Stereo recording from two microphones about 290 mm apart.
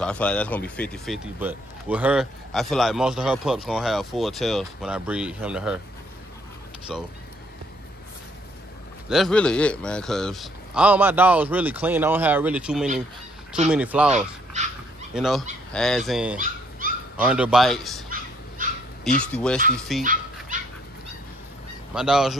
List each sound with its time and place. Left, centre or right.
0.0 s speech: centre
6.9 s speech: centre
9.1 s speech: centre
14.1 s speech: right
15.1 s speech: centre
19.1 s speech: centre
20.0 s dog: right
21.9 s speech: centre